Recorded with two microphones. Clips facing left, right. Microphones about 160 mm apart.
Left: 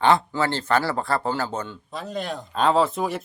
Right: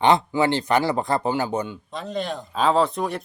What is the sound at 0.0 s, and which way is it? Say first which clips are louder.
Speech: right 2 dB; 20° right (ahead or behind).